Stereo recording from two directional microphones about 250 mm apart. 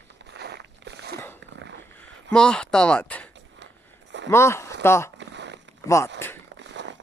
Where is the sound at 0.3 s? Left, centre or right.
Right.